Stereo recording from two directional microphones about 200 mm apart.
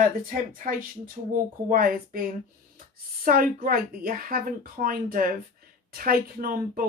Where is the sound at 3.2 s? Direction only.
45° right (ahead or behind).